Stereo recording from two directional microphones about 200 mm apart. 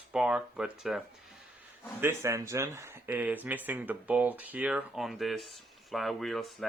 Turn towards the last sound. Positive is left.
turn(degrees=0)  # may be behind; listen again after turning